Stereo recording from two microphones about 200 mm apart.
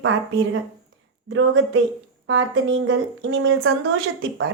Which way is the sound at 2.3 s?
75° right (ahead or behind).